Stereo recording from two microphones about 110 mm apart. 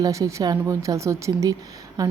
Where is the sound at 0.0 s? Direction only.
30° right (ahead or behind).